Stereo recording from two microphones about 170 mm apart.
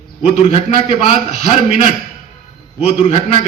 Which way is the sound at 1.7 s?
55° right (ahead or behind).